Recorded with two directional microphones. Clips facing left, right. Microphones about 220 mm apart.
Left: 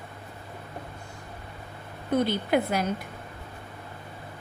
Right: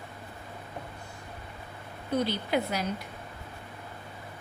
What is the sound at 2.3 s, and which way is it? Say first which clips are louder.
Speech: left 4 dB; 50° left (ahead or behind).